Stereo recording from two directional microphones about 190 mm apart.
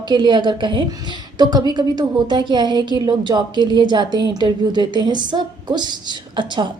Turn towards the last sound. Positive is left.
turn(degrees=-25)  # may be behind; listen again after turning